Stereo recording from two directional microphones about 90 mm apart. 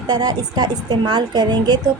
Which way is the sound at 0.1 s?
45° right (ahead or behind).